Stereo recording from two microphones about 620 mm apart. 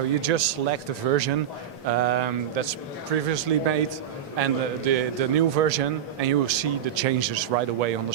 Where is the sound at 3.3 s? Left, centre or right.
Right.